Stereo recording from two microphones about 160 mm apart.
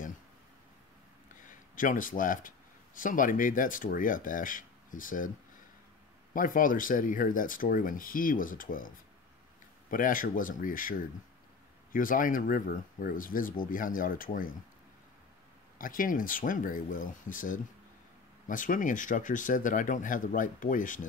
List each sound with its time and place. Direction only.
1.3 s a sound: 55° left (ahead or behind)
3.0 s speech: 55° left (ahead or behind)
6.3 s speech: 60° left (ahead or behind)
15.8 s speech: 60° left (ahead or behind)